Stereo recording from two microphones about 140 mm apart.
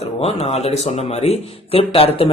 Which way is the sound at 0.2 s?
50° left (ahead or behind).